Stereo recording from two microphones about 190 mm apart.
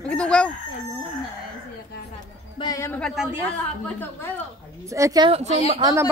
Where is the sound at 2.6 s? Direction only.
20° left (ahead or behind).